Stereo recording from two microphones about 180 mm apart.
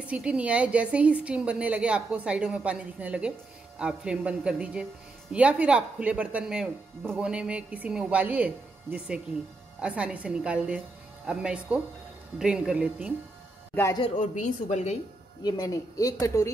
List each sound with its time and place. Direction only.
0.1 s a woman's voice: 5° right (ahead or behind)
13.7 s speech: 15° left (ahead or behind)
14.0 s a woman's voice: 45° left (ahead or behind)
15.4 s a woman's voice: 20° left (ahead or behind)